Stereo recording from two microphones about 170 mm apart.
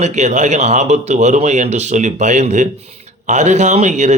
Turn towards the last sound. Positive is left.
turn(degrees=-45)  # may be behind; listen again after turning